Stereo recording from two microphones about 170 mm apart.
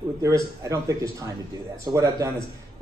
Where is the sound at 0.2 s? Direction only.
20° right (ahead or behind).